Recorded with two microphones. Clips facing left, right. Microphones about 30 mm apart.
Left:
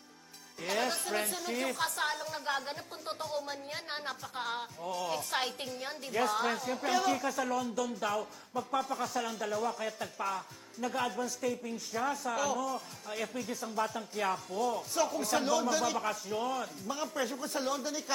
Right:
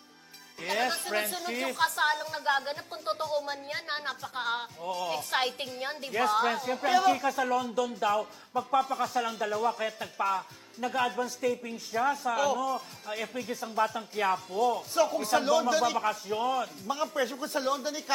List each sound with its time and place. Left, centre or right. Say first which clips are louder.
0.6 s speech: right 3 dB; centre